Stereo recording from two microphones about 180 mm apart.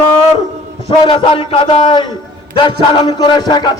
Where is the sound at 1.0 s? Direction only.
30° left (ahead or behind).